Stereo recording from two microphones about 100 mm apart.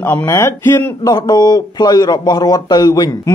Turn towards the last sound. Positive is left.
turn(degrees=40)  # may be behind; listen again after turning